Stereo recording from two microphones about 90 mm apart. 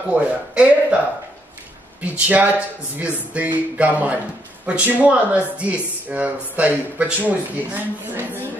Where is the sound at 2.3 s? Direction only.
15° right (ahead or behind).